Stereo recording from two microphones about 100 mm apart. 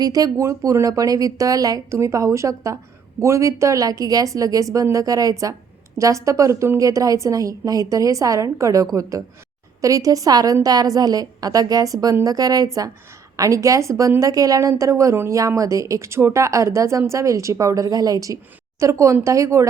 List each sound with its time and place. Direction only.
0.0 s speech: 40° right (ahead or behind)